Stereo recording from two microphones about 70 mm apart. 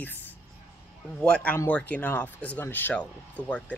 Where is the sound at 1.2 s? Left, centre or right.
Centre.